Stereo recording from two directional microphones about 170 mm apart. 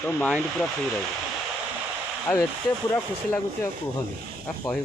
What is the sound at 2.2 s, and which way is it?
Speech, 10° left (ahead or behind).